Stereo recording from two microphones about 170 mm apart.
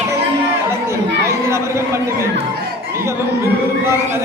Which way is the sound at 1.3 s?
15° right (ahead or behind).